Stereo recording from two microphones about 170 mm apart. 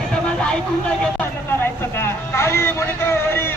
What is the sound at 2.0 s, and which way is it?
A man's voice, 15° left (ahead or behind).